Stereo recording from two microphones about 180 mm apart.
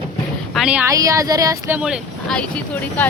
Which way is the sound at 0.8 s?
20° right (ahead or behind).